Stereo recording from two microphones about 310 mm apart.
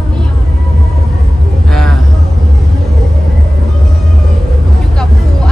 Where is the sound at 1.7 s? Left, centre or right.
Centre.